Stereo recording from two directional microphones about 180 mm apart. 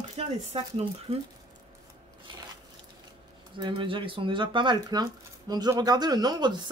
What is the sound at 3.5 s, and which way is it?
Speech, 25° right (ahead or behind).